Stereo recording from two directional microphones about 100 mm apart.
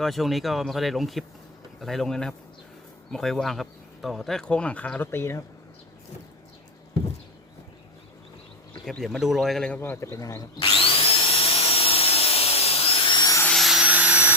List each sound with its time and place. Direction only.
0.0 s speech: centre (ahead or behind); by 5.4 s 25° left (ahead or behind)
8.9 s speech: centre (ahead or behind)
9.7 s speech: 20° left (ahead or behind)
10.6 s vacuum cleaner: 65° left (ahead or behind)
13.5 s vacuum cleaner: centre (ahead or behind)